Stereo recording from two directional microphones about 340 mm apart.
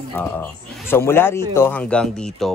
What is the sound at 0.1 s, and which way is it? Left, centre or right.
Speech, centre.